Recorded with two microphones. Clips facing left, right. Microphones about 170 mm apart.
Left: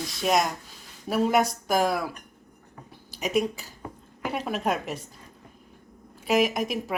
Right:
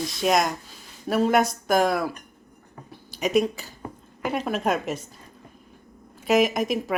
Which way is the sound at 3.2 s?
10° left (ahead or behind).